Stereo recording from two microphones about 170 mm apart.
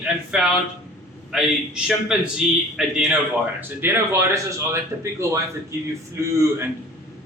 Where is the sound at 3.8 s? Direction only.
15° right (ahead or behind).